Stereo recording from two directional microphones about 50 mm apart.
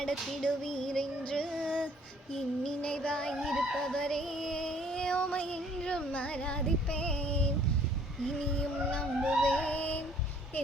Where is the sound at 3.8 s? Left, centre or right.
Centre.